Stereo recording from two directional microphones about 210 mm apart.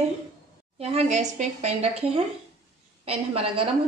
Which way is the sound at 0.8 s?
30° right (ahead or behind).